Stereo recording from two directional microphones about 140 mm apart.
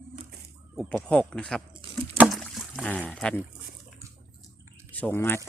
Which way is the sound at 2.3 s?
Centre (ahead or behind).